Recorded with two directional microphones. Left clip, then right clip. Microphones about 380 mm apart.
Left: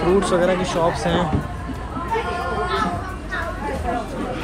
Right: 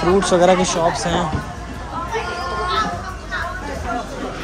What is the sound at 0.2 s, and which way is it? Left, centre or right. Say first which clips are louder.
Speech: right 5 dB; centre.